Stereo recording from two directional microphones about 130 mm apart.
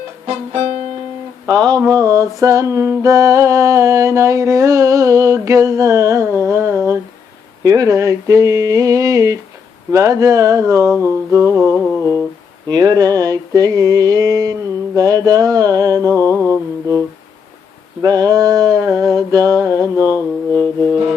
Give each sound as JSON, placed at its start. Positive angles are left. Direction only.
{"t": 1.5, "sound": "mantra", "side_deg": -30}
{"t": 12.6, "sound": "mantra", "side_deg": -30}
{"t": 18.0, "sound": "a sound", "side_deg": -30}
{"t": 20.1, "sound": "music", "side_deg": 15}